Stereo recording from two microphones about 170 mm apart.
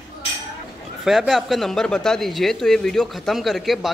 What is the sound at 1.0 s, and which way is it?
Speech, centre (ahead or behind).